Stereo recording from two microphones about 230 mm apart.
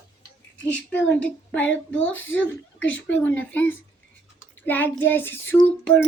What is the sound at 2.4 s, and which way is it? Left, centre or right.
A woman's voice, centre.